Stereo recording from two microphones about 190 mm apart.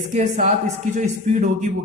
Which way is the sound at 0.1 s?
40° right (ahead or behind).